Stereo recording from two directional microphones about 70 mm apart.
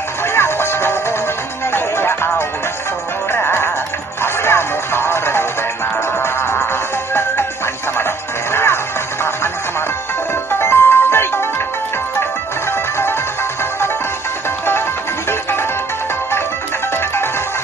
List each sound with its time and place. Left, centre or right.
0.3 s music: left
10.5 s music: left
16.9 s music: left